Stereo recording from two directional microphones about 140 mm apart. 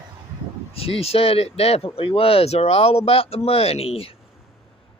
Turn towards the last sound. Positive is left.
turn(degrees=45)  # may be behind; listen again after turning